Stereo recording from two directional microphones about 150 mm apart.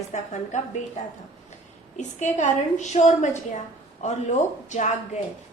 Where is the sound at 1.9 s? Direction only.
55° left (ahead or behind).